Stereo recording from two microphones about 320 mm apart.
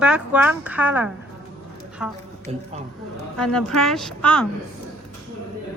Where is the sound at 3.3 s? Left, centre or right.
Centre.